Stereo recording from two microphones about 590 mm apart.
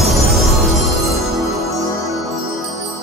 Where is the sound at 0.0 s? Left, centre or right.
Centre.